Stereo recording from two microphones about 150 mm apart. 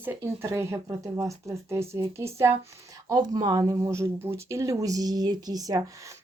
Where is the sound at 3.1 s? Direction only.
30° right (ahead or behind).